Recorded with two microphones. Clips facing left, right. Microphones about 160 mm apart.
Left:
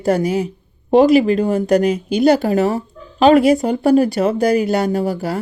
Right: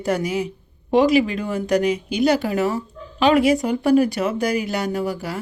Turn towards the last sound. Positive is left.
turn(degrees=35)  # may be behind; listen again after turning